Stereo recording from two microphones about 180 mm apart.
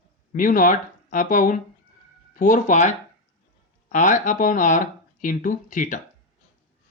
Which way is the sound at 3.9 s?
45° left (ahead or behind).